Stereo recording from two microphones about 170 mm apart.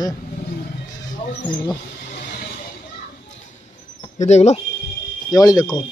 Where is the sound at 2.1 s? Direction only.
60° left (ahead or behind).